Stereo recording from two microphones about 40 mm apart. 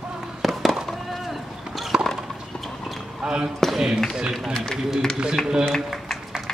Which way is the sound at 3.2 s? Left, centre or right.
Right.